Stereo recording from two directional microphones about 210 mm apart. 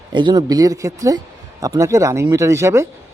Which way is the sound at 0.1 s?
20° right (ahead or behind).